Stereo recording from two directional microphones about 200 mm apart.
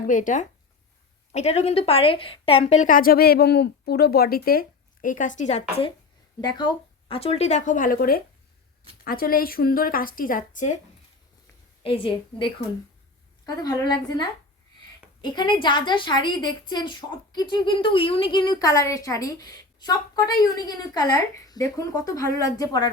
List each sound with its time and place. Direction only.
0.1 s a woman's voice: 40° left (ahead or behind)
11.8 s a woman's voice: 25° left (ahead or behind)